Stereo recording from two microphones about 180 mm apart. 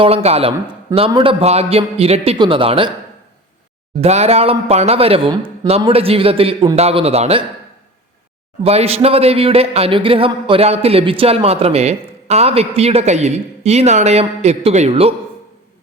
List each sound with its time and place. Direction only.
0.0 s speech: 35° right (ahead or behind)
4.0 s speech: 35° right (ahead or behind)
8.6 s speech: 35° right (ahead or behind)